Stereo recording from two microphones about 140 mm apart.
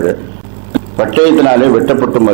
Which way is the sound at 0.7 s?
15° right (ahead or behind).